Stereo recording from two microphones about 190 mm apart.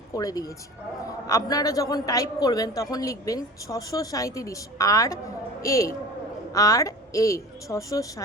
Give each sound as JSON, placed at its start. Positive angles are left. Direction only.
{"t": 0.1, "sound": "a man's voice", "side_deg": 20}